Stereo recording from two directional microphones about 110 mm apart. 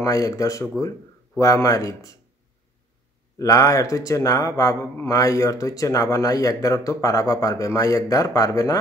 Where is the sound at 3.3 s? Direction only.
30° left (ahead or behind).